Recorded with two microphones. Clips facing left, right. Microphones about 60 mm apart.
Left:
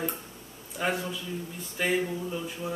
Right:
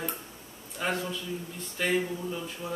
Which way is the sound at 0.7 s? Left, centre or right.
Centre.